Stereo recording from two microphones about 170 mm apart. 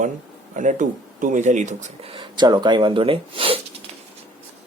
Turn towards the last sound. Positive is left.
turn(degrees=-35)  # may be behind; listen again after turning